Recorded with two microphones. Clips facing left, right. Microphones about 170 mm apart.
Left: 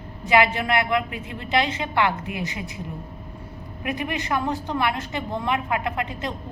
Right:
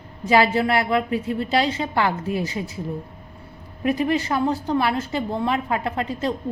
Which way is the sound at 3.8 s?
35° right (ahead or behind).